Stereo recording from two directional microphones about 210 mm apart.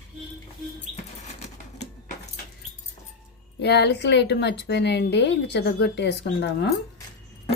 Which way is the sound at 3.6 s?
50° left (ahead or behind).